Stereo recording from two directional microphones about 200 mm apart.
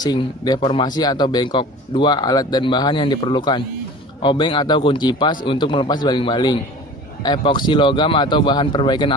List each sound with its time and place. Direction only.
0.0 s speech: 20° left (ahead or behind)